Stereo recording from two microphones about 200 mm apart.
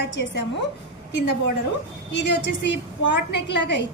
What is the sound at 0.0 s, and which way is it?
Speech, 60° left (ahead or behind).